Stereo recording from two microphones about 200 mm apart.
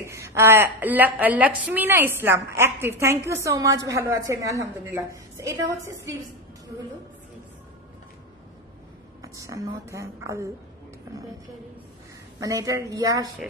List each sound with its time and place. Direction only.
0.1 s a woman's voice: 15° right (ahead or behind)
9.2 s a sound: 15° right (ahead or behind)
9.8 s a woman's voice: 15° right (ahead or behind)
12.4 s a woman's voice: 15° right (ahead or behind)